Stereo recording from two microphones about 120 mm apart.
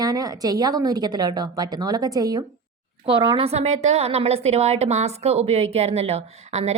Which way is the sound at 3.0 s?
45° right (ahead or behind).